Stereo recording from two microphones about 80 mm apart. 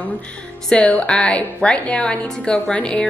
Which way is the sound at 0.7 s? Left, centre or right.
Centre.